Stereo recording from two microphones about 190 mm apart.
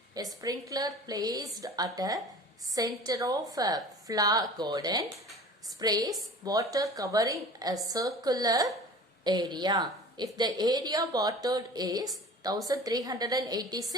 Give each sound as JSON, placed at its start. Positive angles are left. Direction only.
{"t": 0.4, "sound": "a woman's voice", "side_deg": -20}